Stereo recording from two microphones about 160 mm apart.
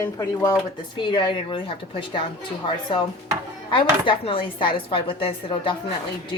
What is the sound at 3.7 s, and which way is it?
Speech, 35° left (ahead or behind).